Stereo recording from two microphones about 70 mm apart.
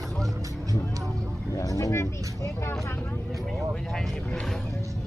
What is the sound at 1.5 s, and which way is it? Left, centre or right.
Speech, left.